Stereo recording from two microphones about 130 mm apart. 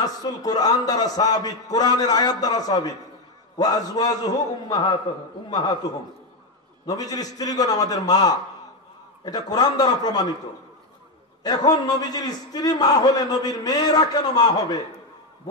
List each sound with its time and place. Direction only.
0.0 s a man's voice: 30° left (ahead or behind)
6.9 s a man's voice: 30° left (ahead or behind)
11.4 s a man's voice: 30° left (ahead or behind)